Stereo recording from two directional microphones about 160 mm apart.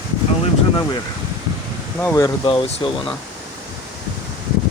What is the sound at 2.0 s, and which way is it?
Speech, 20° left (ahead or behind).